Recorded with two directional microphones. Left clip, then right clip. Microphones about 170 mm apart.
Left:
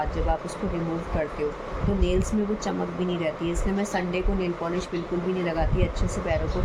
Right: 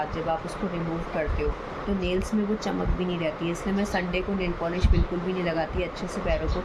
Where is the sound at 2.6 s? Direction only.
5° right (ahead or behind).